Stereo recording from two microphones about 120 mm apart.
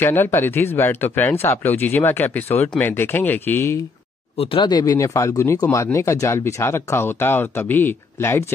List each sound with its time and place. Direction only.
0.0 s speech: 20° left (ahead or behind)
4.4 s speech: 45° left (ahead or behind); by 8.5 s 20° left (ahead or behind)